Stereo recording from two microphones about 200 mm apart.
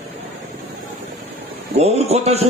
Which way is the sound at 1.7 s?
30° right (ahead or behind).